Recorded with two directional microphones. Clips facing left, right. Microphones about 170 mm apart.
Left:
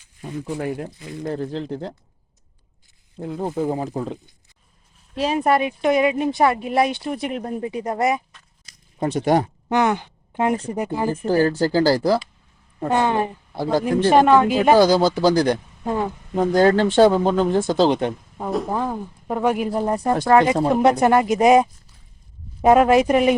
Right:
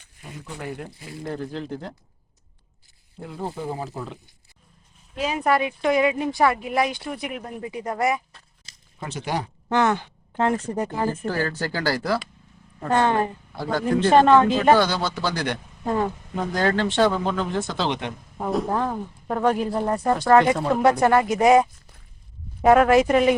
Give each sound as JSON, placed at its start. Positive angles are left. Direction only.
{"t": 1.3, "sound": "speech", "side_deg": 35}
{"t": 3.2, "sound": "speech", "side_deg": 20}
{"t": 3.5, "sound": "speech", "side_deg": 40}
{"t": 8.3, "sound": "a sound", "side_deg": -35}
{"t": 9.0, "sound": "speech", "side_deg": 50}
{"t": 9.6, "sound": "speech", "side_deg": 15}
{"t": 11.3, "sound": "speech", "side_deg": 30}
{"t": 12.9, "sound": "speech", "side_deg": 15}
{"t": 13.6, "sound": "speech", "side_deg": 35}
{"t": 13.8, "sound": "speech", "side_deg": 10}
{"t": 14.8, "sound": "speech", "side_deg": 35}
{"t": 15.8, "sound": "speech", "side_deg": 5}
{"t": 16.3, "sound": "speech", "side_deg": 35}
{"t": 18.3, "sound": "speech", "side_deg": 0}